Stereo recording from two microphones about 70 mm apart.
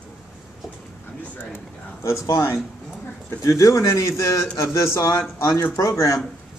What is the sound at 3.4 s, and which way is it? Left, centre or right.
Speech, left.